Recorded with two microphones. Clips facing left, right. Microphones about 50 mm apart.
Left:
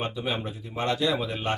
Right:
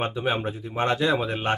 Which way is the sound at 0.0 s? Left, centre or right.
Right.